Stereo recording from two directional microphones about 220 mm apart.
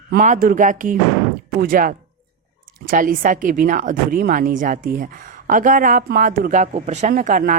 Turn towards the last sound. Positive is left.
turn(degrees=-35)  # may be behind; listen again after turning